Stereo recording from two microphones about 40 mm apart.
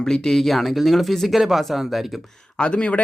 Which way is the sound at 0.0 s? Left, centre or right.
Centre.